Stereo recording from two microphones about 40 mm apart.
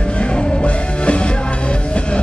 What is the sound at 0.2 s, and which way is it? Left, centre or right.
Music, left.